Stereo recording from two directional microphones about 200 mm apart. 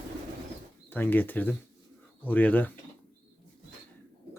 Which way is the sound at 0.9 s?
10° left (ahead or behind).